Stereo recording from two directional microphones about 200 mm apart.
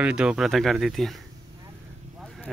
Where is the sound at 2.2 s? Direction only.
Centre (ahead or behind).